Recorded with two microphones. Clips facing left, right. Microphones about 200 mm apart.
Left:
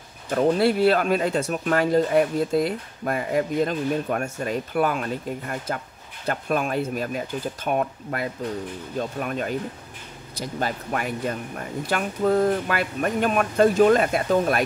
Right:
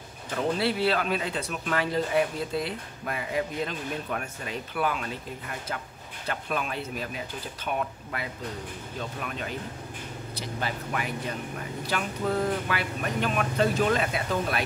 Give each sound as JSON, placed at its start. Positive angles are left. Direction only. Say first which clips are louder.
{"t": 0.3, "sound": "speech", "louder": "left 7 dB", "side_deg": 45}